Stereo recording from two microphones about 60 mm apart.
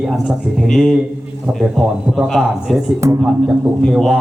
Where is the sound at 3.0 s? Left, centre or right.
Right.